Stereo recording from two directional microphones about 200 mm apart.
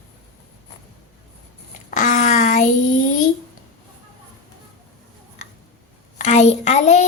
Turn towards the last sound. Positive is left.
turn(degrees=35)  # may be behind; listen again after turning